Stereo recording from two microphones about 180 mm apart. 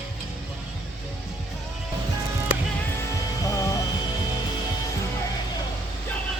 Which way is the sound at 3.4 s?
20° left (ahead or behind).